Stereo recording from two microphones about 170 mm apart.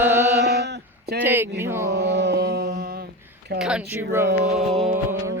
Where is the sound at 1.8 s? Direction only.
90° right; by 3.0 s 65° right (ahead or behind).